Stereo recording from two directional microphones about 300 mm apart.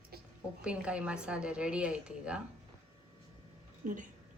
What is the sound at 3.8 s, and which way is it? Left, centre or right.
Speech, right.